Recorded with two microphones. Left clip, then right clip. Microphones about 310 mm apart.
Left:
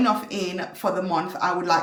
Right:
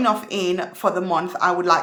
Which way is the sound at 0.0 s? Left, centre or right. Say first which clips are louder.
Right 3 dB; centre.